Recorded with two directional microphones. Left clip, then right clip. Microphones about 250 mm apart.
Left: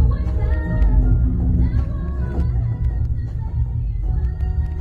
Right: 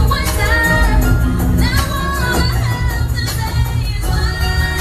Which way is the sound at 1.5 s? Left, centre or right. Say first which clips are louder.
Right 12 dB; centre.